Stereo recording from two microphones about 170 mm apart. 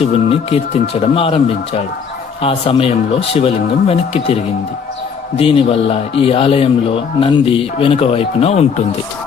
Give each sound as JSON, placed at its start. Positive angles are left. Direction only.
{"t": 0.0, "sound": "speech", "side_deg": 35}
{"t": 5.4, "sound": "speech", "side_deg": 35}